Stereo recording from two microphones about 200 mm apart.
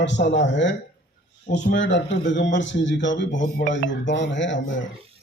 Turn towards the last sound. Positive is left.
turn(degrees=65)  # may be behind; listen again after turning